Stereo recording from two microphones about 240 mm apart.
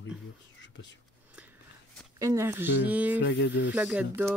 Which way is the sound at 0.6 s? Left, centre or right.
Left.